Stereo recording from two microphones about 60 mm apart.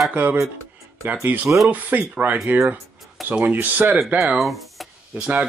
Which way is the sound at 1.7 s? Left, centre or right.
Right.